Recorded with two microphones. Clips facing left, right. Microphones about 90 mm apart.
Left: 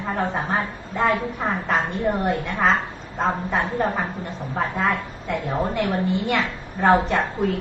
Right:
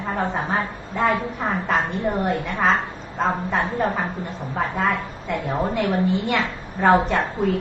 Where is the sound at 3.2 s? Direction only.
Centre (ahead or behind).